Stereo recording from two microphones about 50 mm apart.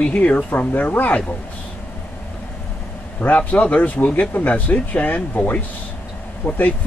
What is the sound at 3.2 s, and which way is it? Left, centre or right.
Speech, left.